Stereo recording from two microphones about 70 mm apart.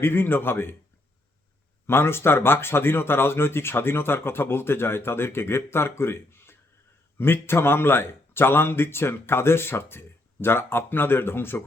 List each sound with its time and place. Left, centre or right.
0.0 s speech: left
1.9 s speech: left